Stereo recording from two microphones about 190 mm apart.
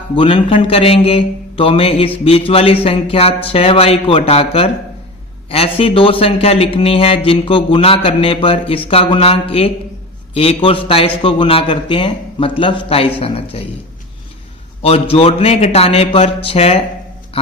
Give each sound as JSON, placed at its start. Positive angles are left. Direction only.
{"t": 0.2, "sound": "a man's voice", "side_deg": 25}
{"t": 14.8, "sound": "a man's voice", "side_deg": 30}